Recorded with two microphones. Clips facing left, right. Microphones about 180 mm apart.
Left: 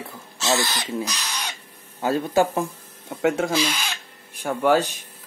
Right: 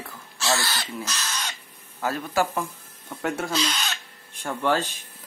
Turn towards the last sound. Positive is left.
turn(degrees=10)  # may be behind; listen again after turning